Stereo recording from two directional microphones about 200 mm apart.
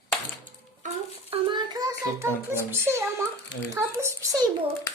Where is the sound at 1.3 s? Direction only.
25° right (ahead or behind).